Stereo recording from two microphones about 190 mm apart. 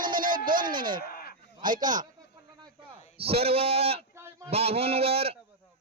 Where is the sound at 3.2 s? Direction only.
30° right (ahead or behind).